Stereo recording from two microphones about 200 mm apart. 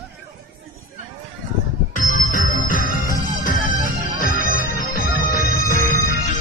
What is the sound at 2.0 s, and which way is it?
Music, 40° left (ahead or behind).